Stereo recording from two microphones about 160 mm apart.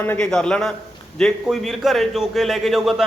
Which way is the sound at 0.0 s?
10° left (ahead or behind).